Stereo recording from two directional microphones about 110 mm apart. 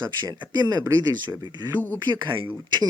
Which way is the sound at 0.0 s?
40° right (ahead or behind).